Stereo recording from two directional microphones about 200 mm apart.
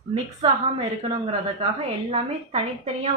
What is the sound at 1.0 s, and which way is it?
A woman's voice, 30° right (ahead or behind).